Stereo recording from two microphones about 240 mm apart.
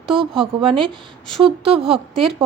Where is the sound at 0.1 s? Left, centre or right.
Right.